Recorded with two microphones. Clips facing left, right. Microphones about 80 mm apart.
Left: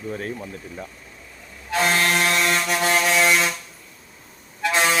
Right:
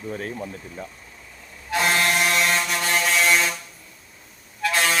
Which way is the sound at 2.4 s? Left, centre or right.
Centre.